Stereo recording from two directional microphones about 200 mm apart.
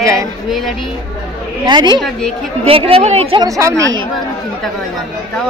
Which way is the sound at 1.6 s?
20° right (ahead or behind).